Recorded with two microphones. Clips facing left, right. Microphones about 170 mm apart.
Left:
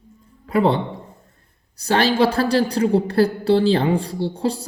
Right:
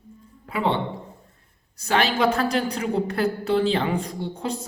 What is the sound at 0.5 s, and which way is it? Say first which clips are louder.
A woman's voice: left 6 dB; 40° left (ahead or behind).